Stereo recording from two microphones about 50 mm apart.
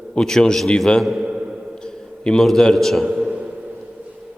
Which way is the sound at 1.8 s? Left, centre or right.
Centre.